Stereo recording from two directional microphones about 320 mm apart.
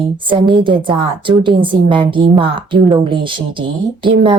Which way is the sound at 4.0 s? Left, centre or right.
Centre.